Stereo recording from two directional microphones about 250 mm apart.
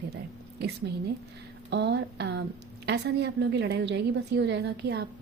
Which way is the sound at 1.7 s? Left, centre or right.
Right.